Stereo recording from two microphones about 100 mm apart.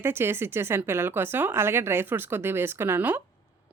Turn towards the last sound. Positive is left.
turn(degrees=-20)  # may be behind; listen again after turning